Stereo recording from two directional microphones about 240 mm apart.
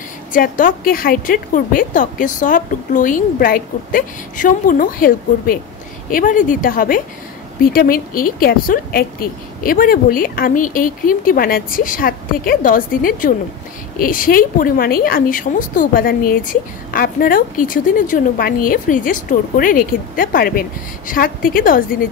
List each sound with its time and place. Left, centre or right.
0.3 s speech: left